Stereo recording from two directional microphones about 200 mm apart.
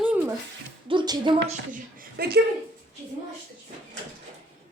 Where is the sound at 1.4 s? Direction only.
40° right (ahead or behind).